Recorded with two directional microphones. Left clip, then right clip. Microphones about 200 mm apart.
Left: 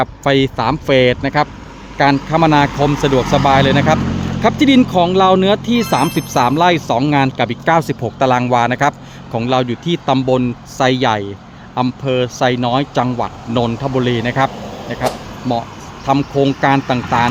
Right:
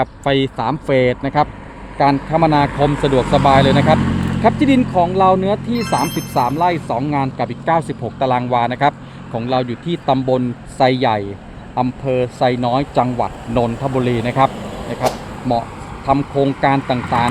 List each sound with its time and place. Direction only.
0.0 s speech: 15° left (ahead or behind)
2.6 s speech: 50° left (ahead or behind)
3.3 s speech: 10° left (ahead or behind)
4.0 s vehicle: 50° right (ahead or behind)
4.5 s speech: 30° left (ahead or behind); by 14.5 s 5° left (ahead or behind)
15.0 s a sound: 5° left (ahead or behind)
16.0 s speech: 15° left (ahead or behind)